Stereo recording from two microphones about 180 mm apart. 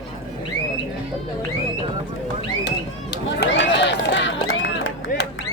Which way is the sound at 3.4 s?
80° left.